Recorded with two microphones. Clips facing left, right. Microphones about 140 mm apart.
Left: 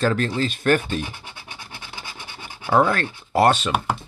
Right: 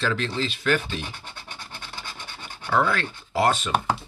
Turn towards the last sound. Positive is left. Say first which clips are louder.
# left 5 dB
turn(degrees=65)  # may be behind; listen again after turning